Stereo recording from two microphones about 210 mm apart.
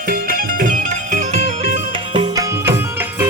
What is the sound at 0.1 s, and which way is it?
Music, 40° right (ahead or behind).